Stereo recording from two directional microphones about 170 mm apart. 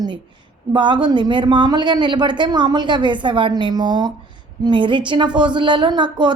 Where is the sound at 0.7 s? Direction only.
25° right (ahead or behind).